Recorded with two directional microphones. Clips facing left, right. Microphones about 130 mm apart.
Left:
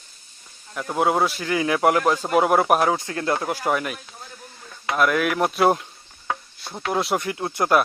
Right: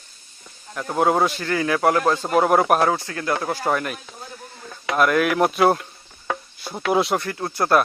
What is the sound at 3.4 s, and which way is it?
Speech, 10° left (ahead or behind).